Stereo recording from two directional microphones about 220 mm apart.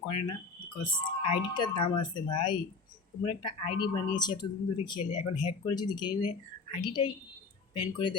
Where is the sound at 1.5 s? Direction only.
20° left (ahead or behind).